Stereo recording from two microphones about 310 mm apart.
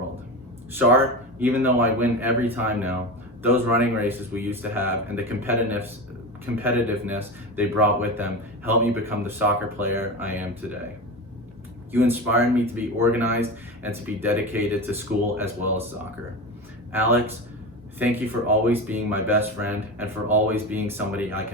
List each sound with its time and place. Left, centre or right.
0.7 s speech: centre
11.9 s speech: centre
16.9 s speech: centre